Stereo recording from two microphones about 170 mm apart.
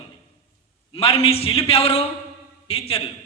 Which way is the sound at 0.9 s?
35° left (ahead or behind).